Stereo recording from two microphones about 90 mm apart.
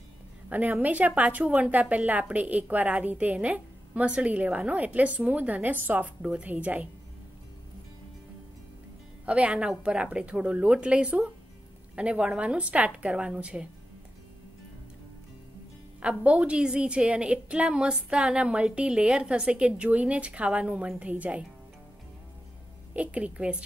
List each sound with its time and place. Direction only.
0.5 s speech: 15° right (ahead or behind)
9.2 s speech: 15° right (ahead or behind)
16.0 s speech: 15° right (ahead or behind)
22.9 s speech: 15° right (ahead or behind)